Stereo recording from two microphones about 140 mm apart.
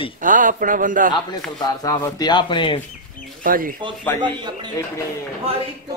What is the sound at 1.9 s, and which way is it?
Speech, 25° left (ahead or behind).